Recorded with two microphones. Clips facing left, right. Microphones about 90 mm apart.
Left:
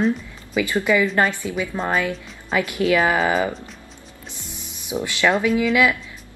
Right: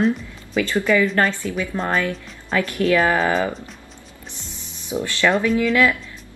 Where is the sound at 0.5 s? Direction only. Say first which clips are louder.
Right 1 dB; 10° left (ahead or behind).